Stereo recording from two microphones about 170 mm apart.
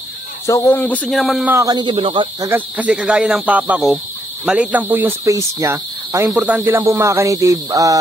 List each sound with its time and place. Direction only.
0.5 s speech: 10° left (ahead or behind)
1.5 s a man's voice: 20° right (ahead or behind)
2.4 s speech: 10° right (ahead or behind)